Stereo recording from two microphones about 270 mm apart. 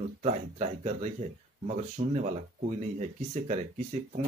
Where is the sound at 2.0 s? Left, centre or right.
Right.